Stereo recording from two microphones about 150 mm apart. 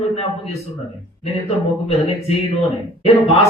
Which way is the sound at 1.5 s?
45° left (ahead or behind).